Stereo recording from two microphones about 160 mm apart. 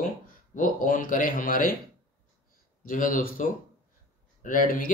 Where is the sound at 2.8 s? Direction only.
60° left (ahead or behind).